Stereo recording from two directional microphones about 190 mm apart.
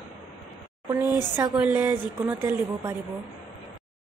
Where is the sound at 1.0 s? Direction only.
20° left (ahead or behind).